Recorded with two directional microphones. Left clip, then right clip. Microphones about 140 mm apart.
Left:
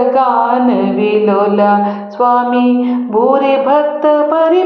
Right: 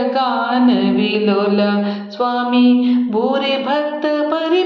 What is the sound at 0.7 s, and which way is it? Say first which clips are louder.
Music: left 4 dB; 10° right (ahead or behind).